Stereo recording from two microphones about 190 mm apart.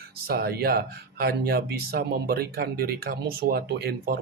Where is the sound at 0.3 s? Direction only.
55° right (ahead or behind).